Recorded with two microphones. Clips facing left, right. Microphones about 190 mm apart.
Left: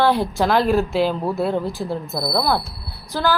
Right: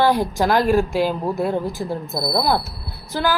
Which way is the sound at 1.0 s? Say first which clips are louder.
Even; 15° right (ahead or behind).